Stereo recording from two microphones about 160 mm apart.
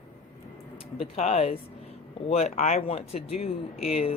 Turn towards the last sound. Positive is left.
turn(degrees=40)  # may be behind; listen again after turning